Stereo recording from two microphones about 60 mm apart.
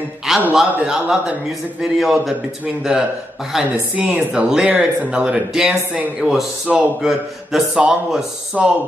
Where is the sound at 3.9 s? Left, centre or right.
Centre.